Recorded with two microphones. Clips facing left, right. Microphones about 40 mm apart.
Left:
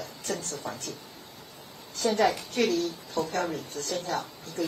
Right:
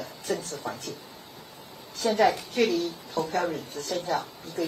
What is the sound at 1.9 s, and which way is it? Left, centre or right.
A woman's voice, centre.